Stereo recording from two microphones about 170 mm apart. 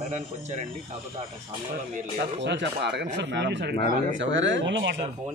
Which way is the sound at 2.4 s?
90° right.